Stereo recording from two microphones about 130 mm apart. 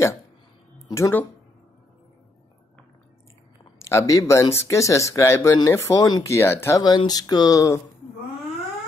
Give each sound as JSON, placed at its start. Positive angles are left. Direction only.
{"t": 0.7, "sound": "music", "side_deg": 25}
{"t": 3.9, "sound": "speech", "side_deg": 25}
{"t": 6.8, "sound": "speech", "side_deg": 35}